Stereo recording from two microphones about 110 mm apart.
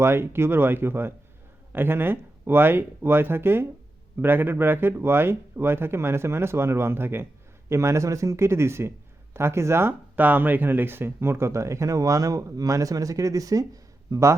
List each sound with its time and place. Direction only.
0.0 s speech: 20° right (ahead or behind)